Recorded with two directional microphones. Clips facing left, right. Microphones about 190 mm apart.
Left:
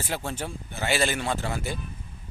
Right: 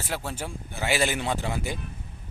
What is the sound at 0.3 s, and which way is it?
Speech, 10° right (ahead or behind).